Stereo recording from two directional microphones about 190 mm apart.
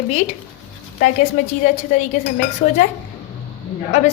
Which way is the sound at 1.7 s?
40° left (ahead or behind).